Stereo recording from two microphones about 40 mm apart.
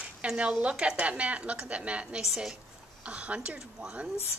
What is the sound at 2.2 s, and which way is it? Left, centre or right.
Speech, centre.